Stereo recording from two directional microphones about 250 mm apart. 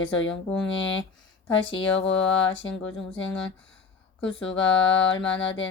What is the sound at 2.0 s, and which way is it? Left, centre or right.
Speech, left.